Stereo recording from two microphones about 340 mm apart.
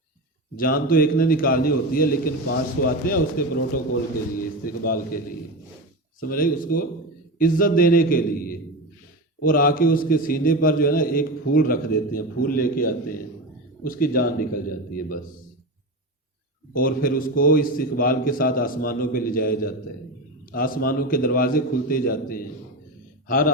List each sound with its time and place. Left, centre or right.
0.5 s a man's voice: left
4.6 s a man's voice: left
16.7 s a man's voice: left